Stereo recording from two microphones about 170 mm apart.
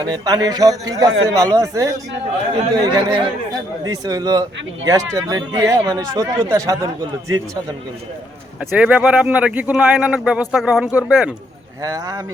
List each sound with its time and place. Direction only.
0.0 s speech: 20° right (ahead or behind)
8.7 s speech: 10° right (ahead or behind)